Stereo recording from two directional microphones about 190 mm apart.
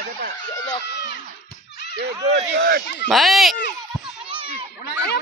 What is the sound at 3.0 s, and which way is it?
Speech, centre (ahead or behind).